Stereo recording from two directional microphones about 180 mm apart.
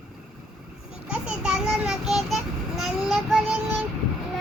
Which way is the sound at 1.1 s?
5° right (ahead or behind).